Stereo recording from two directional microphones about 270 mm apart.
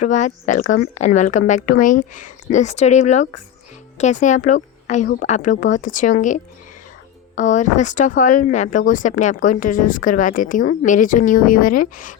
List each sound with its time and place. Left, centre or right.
0.0 s speech: left